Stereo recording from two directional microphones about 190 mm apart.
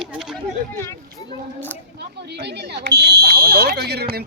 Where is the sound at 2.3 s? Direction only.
65° right (ahead or behind).